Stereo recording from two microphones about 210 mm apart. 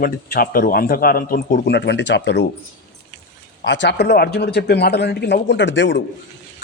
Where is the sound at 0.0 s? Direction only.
45° left (ahead or behind).